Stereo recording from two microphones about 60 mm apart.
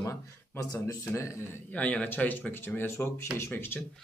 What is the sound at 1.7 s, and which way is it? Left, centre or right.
Speech, left.